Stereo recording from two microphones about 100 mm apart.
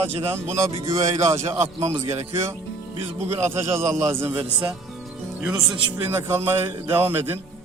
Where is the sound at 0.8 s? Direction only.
30° right (ahead or behind).